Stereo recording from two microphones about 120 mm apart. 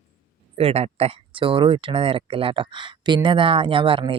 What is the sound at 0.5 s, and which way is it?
Speech, 55° right (ahead or behind).